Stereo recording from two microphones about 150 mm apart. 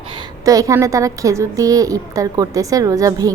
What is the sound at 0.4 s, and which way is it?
A woman's voice, 20° right (ahead or behind).